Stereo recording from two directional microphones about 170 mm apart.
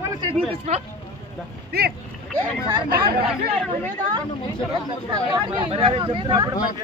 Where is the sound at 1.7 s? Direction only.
70° right (ahead or behind).